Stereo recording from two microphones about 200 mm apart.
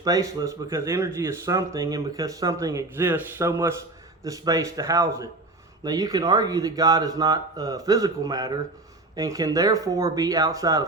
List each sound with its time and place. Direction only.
0.0 s speech: 20° right (ahead or behind)